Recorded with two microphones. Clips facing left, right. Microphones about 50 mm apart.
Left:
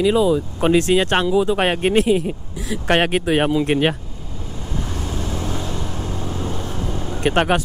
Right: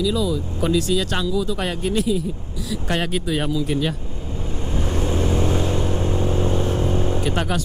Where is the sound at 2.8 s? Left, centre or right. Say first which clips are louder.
Left 7 dB; left.